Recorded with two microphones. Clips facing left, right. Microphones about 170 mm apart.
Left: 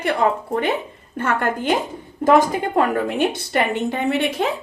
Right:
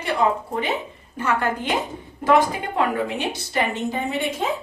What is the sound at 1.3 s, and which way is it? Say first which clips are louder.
A woman's voice: left 2 dB; 50° left (ahead or behind).